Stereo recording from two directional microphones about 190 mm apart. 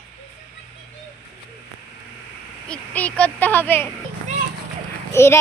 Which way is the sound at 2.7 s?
5° left (ahead or behind).